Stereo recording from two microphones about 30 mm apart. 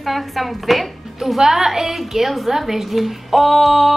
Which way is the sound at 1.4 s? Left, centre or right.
Centre.